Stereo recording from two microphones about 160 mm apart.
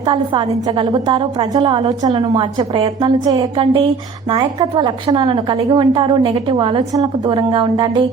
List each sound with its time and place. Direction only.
0.0 s a woman's voice: 25° right (ahead or behind)